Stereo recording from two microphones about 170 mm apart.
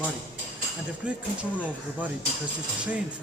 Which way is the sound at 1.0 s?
5° right (ahead or behind).